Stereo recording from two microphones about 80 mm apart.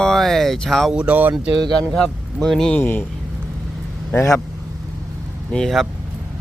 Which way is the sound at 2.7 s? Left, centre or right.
Left.